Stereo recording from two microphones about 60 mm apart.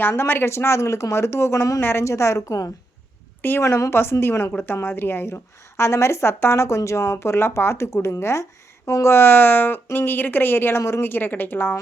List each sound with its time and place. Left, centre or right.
0.0 s a woman's voice: left
2.0 s a woman's voice: left
3.6 s a woman's voice: left
11.0 s a woman's voice: left